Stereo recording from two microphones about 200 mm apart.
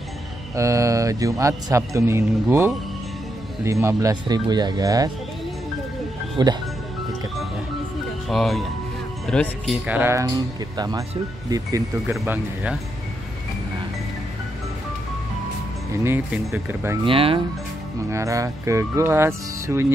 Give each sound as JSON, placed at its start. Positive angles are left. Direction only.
{"t": 0.6, "sound": "speech", "side_deg": -15}
{"t": 6.4, "sound": "speech", "side_deg": -20}
{"t": 8.3, "sound": "speech", "side_deg": 0}
{"t": 9.8, "sound": "speech", "side_deg": -10}
{"t": 16.0, "sound": "speech", "side_deg": -10}
{"t": 17.0, "sound": "speech", "side_deg": -25}
{"t": 18.1, "sound": "speech", "side_deg": -15}